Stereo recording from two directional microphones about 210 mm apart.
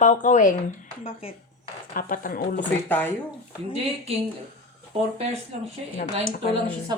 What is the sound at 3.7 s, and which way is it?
Speech, 30° right (ahead or behind).